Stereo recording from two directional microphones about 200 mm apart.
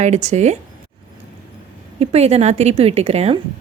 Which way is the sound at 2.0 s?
30° right (ahead or behind).